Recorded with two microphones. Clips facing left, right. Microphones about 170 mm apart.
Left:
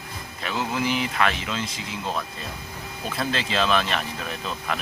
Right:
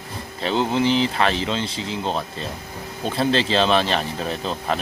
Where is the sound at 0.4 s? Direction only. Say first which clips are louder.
Right 6 dB; 30° right (ahead or behind).